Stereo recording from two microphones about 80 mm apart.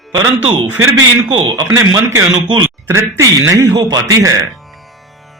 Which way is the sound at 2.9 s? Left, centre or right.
Right.